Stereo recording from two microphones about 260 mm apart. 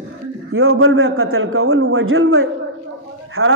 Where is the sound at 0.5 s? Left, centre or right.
Right.